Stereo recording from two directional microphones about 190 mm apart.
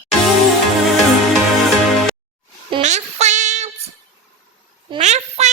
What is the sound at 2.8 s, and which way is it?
Child singing, 40° right (ahead or behind).